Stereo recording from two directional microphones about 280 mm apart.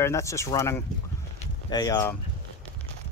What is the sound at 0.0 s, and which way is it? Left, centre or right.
Speech, centre.